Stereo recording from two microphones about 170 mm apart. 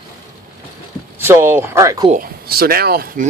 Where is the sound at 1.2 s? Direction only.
15° right (ahead or behind).